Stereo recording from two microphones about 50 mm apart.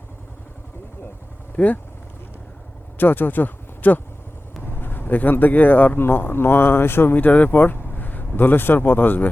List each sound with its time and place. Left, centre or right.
1.5 s speech: left
3.0 s speech: left
7.2 s speech: left